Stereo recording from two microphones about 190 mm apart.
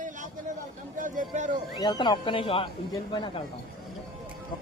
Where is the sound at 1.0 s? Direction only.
45° right (ahead or behind).